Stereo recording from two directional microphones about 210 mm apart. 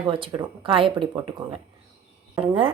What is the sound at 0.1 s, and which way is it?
Speech, 20° right (ahead or behind).